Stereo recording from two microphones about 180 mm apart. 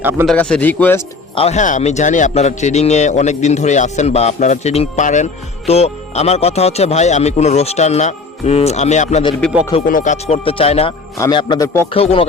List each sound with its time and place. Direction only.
0.0 s speech: 10° right (ahead or behind)
0.3 s speech: 5° left (ahead or behind)
1.4 s a man's voice: 40° left (ahead or behind); by 11.9 s 15° left (ahead or behind)
11.9 s a man's voice: 30° left (ahead or behind)